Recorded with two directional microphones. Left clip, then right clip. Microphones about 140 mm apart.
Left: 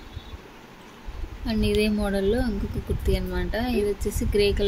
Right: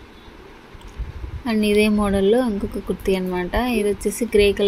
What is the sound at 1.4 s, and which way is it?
A woman's voice, 20° right (ahead or behind).